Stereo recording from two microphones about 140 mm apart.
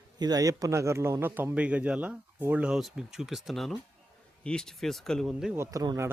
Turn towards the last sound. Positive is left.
turn(degrees=-20)  # may be behind; listen again after turning